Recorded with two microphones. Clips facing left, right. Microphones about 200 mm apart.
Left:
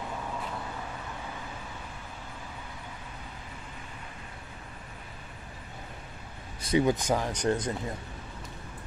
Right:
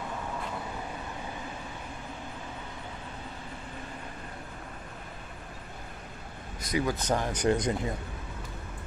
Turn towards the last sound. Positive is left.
turn(degrees=-10)  # may be behind; listen again after turning